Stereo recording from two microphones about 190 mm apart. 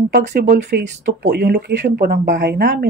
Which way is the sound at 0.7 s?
65° right (ahead or behind).